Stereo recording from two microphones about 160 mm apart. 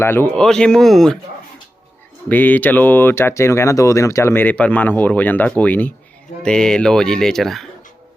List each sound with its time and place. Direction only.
0.0 s speech: 15° left (ahead or behind)
2.3 s speech: 10° left (ahead or behind)